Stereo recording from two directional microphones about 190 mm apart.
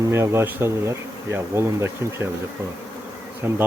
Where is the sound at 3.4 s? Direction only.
10° right (ahead or behind).